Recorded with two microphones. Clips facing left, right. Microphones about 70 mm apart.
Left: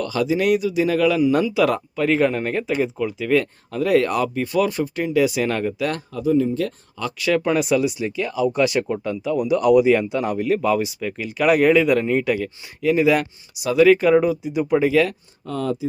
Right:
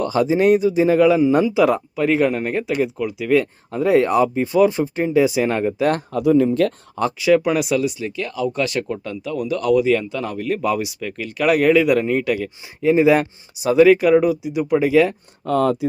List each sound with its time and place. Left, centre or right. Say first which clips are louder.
0.0 s speech: right 4 dB; right
2.0 s speech: even; centre
3.7 s speech: right 2 dB; right
5.8 s speech: right 5 dB; right
6.1 s speech: right 3 dB; right
7.2 s speech: right 2 dB; centre
7.9 s speech: left 2 dB; centre
10.5 s speech: even; centre
12.8 s speech: right 3 dB; right
13.8 s speech: even; centre
15.4 s speech: right 6 dB; right